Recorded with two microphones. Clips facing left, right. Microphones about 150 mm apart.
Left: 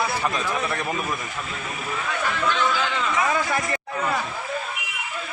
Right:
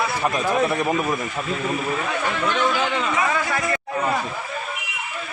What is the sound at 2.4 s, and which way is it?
Speech, 20° right (ahead or behind).